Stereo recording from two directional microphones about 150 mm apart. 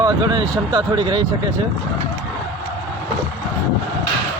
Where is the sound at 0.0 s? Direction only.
30° right (ahead or behind).